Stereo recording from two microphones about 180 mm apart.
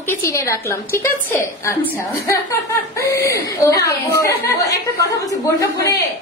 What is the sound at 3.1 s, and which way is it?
A woman's voice, 15° left (ahead or behind).